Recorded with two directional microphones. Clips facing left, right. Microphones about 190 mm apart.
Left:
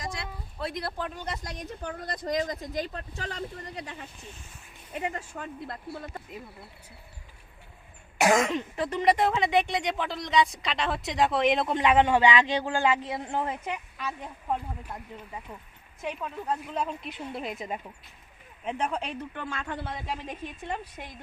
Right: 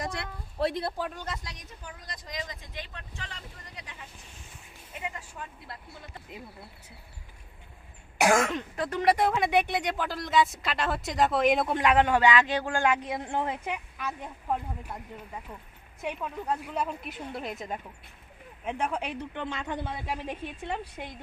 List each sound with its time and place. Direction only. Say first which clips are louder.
0.0 s a sound: right 2 dB; 60° right (ahead or behind)
0.7 s speech: right 2 dB; 25° right (ahead or behind)
1.5 s speech: left 9 dB; 55° left (ahead or behind)
8.2 s speech: left 1 dB; 5° left (ahead or behind)
12.0 s a man's voice: left 1 dB; 10° left (ahead or behind)
12.7 s a woman's voice: even; 15° right (ahead or behind)
15.5 s a man's voice: left 1 dB; 5° left (ahead or behind)
16.0 s a woman's voice: even; 10° right (ahead or behind)